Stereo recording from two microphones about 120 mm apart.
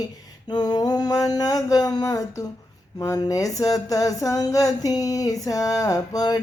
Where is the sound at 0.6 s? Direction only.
35° left (ahead or behind).